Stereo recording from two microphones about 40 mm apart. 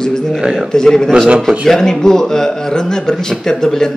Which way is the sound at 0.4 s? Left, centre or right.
Right.